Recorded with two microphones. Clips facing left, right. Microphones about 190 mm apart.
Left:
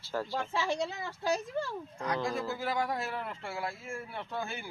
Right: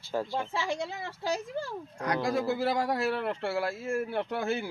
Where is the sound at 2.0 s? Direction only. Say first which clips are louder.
Right 5 dB; 75° right (ahead or behind).